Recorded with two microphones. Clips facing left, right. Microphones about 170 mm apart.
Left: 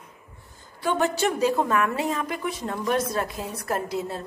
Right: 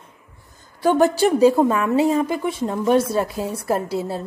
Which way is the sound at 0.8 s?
35° right (ahead or behind).